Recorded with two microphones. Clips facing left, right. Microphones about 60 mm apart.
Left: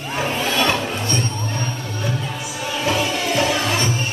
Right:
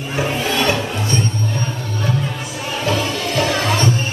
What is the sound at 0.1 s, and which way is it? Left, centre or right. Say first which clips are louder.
Music: right 2 dB; centre.